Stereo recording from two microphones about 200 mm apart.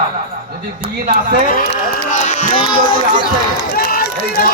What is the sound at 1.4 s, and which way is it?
A man's voice, 45° left (ahead or behind).